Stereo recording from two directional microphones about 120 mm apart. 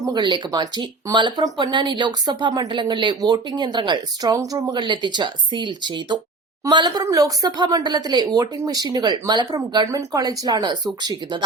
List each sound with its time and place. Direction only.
0.0 s speech: 40° right (ahead or behind)
4.8 s speech: 40° right (ahead or behind)